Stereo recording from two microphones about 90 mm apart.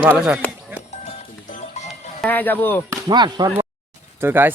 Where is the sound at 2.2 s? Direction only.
20° left (ahead or behind).